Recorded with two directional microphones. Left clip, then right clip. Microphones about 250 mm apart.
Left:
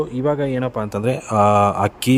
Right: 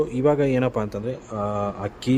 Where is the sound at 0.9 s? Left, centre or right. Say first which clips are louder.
Left 10 dB; left.